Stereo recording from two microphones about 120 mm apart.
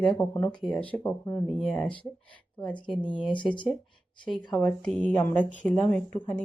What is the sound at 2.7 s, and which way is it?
Speech, 40° left (ahead or behind).